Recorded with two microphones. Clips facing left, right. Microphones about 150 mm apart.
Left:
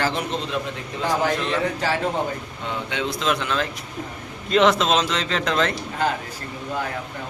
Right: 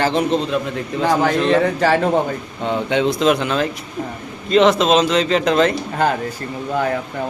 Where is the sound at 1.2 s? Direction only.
65° right (ahead or behind).